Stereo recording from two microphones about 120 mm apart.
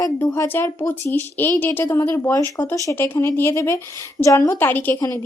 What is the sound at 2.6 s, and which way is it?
Speech, 35° left (ahead or behind).